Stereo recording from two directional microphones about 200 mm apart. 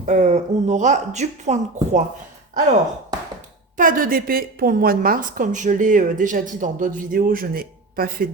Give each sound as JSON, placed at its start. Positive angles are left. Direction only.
{"t": 0.0, "sound": "speech", "side_deg": -35}
{"t": 3.8, "sound": "a woman's voice", "side_deg": -45}